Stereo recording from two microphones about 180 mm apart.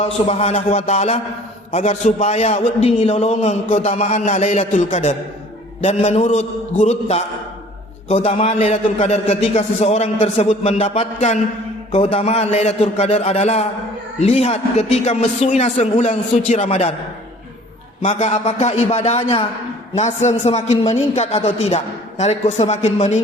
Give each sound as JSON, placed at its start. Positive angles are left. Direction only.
{"t": 0.0, "sound": "a man's voice", "side_deg": 35}
{"t": 18.0, "sound": "a man's voice", "side_deg": 40}